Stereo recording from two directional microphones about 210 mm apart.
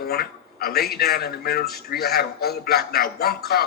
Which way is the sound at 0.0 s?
45° left (ahead or behind).